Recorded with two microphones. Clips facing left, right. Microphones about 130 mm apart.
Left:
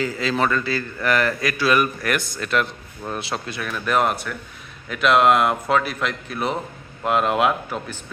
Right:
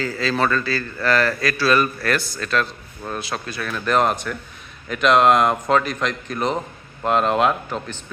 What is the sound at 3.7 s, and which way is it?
A man's voice, 5° left (ahead or behind).